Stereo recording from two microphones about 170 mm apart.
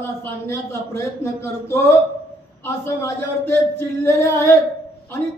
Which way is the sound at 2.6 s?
15° left (ahead or behind).